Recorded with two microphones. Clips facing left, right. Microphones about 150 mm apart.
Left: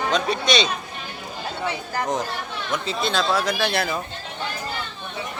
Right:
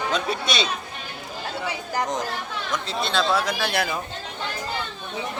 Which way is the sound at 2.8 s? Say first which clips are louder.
Even; centre (ahead or behind).